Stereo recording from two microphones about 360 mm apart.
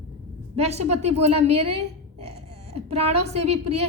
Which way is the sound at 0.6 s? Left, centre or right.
Centre.